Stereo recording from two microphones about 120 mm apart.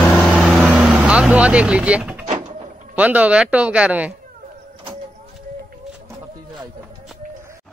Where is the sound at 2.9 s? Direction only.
10° right (ahead or behind).